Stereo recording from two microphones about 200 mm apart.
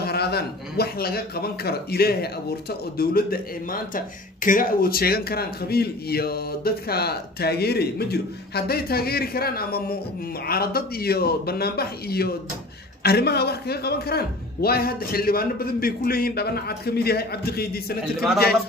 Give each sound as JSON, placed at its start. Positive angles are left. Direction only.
{"t": 0.0, "sound": "speech", "side_deg": 50}